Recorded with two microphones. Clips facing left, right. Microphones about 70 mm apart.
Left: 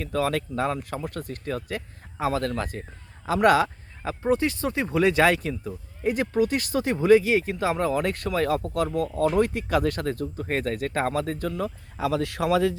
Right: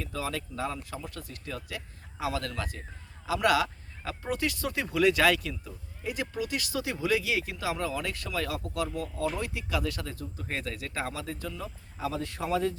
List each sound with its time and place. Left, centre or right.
0.0 s speech: left